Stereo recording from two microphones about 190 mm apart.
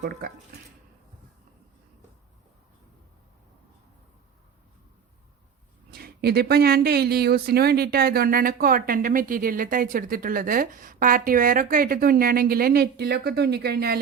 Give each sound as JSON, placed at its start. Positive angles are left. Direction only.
{"t": 0.0, "sound": "speech", "side_deg": -55}
{"t": 5.9, "sound": "speech", "side_deg": -55}